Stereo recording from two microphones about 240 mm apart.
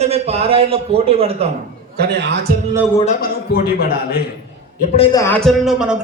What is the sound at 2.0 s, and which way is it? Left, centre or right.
Speech, right.